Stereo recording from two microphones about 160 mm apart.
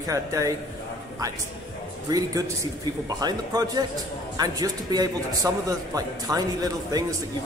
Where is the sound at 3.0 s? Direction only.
25° right (ahead or behind).